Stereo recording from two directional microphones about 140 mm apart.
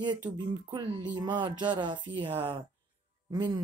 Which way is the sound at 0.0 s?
30° right (ahead or behind).